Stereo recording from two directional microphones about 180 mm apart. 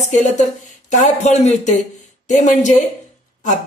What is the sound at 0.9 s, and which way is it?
A man's voice, 40° left (ahead or behind).